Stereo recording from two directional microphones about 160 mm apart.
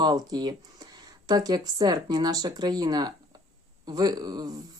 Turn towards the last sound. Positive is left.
turn(degrees=-25)  # may be behind; listen again after turning